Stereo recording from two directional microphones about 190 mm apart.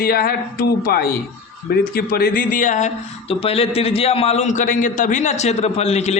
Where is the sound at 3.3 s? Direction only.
30° left (ahead or behind).